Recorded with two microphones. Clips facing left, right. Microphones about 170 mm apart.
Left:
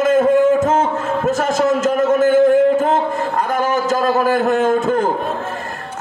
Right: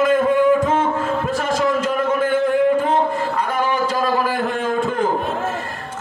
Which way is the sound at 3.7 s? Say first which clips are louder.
Left 4 dB; 45° left (ahead or behind).